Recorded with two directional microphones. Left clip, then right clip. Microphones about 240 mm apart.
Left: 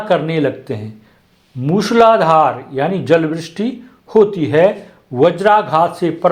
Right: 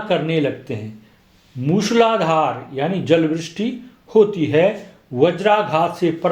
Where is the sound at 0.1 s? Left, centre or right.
Centre.